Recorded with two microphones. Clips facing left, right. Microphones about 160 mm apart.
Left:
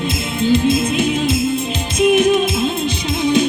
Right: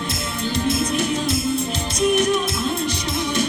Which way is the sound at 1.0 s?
90° left.